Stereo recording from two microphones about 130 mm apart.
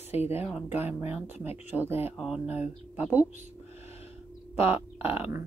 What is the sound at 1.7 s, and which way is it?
Speech, 15° right (ahead or behind).